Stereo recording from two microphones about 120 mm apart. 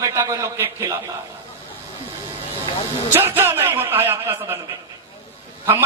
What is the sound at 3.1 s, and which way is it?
A man's voice, 20° right (ahead or behind).